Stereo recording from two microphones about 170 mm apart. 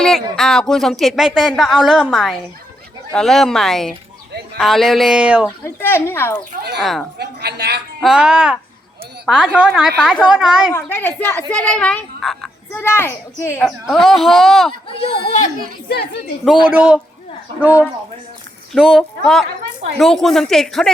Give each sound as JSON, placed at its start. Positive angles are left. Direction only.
{"t": 0.3, "sound": "speech", "side_deg": 0}
{"t": 5.5, "sound": "a child's voice", "side_deg": 15}
{"t": 6.5, "sound": "speech", "side_deg": -65}
{"t": 6.7, "sound": "speech", "side_deg": 0}
{"t": 7.2, "sound": "a woman's voice", "side_deg": -70}
{"t": 8.0, "sound": "speech", "side_deg": -5}
{"t": 10.7, "sound": "a child's voice", "side_deg": 15}
{"t": 12.7, "sound": "a child's voice", "side_deg": 15}
{"t": 13.7, "sound": "speech", "side_deg": 0}
{"t": 14.8, "sound": "speech", "side_deg": 30}
{"t": 16.6, "sound": "a man's voice", "side_deg": -10}